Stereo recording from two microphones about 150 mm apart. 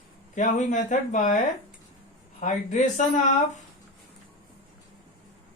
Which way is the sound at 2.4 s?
55° left (ahead or behind).